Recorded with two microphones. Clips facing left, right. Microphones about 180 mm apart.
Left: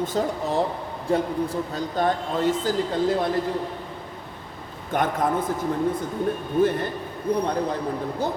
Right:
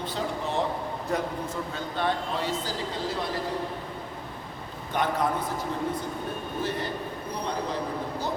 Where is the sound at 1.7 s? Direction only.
45° left (ahead or behind).